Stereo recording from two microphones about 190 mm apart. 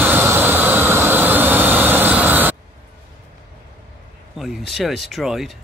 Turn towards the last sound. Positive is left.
turn(degrees=0)  # may be behind; listen again after turning